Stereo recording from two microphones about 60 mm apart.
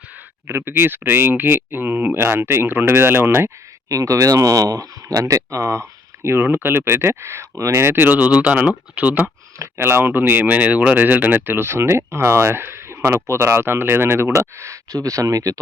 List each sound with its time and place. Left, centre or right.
0.4 s speech: right
3.8 s speech: right
6.2 s speech: right
7.9 s speech: right
9.7 s speech: right